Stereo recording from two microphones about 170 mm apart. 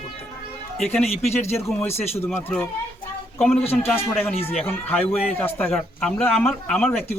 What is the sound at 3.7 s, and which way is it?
A man's voice, 15° left (ahead or behind).